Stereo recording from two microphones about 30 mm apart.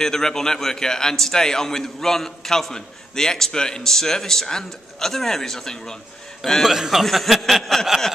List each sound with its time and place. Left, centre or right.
0.0 s speech: centre
6.7 s speech: centre
7.0 s a sound: centre